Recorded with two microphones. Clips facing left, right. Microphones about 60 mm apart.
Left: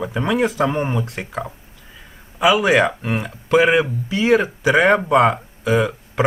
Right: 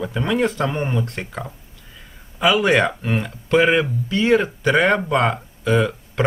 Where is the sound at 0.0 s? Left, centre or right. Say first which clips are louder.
Left 1 dB; centre.